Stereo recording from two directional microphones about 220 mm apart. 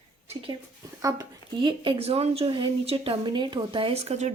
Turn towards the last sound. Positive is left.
turn(degrees=-30)  # may be behind; listen again after turning